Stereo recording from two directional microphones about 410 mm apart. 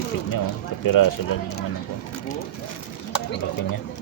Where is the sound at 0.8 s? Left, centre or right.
Left.